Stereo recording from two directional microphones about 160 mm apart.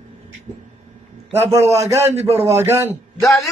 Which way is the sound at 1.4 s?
15° right (ahead or behind).